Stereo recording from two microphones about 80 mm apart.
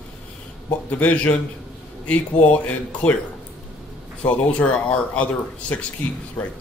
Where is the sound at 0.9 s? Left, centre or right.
Centre.